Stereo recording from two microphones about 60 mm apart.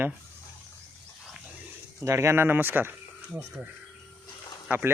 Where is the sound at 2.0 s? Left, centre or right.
Right.